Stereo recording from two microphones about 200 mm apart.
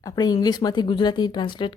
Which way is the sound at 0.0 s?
20° left (ahead or behind).